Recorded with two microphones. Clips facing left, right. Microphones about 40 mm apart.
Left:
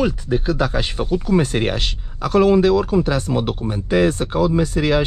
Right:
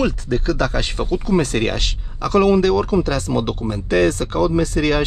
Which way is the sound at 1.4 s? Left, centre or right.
Centre.